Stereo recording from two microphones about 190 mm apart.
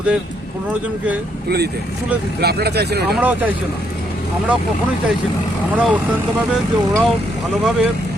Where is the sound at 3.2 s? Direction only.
10° right (ahead or behind).